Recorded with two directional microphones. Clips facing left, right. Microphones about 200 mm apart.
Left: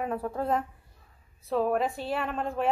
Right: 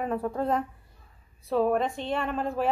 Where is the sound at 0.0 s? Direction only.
Centre (ahead or behind).